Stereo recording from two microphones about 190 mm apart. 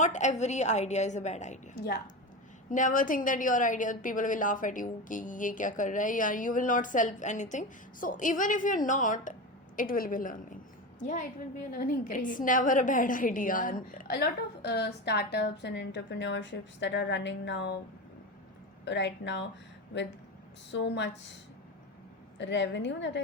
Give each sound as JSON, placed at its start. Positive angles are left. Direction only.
{"t": 0.0, "sound": "a woman's voice", "side_deg": 40}
{"t": 18.9, "sound": "a woman's voice", "side_deg": 70}
{"t": 20.7, "sound": "a woman's voice", "side_deg": 65}
{"t": 22.4, "sound": "a woman's voice", "side_deg": 70}